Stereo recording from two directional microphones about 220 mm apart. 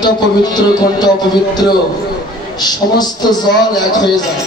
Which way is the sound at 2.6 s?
20° left (ahead or behind).